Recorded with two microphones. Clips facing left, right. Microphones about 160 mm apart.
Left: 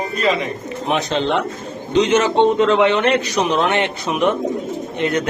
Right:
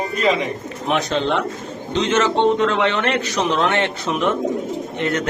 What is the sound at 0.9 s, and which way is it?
A man's voice, 20° left (ahead or behind).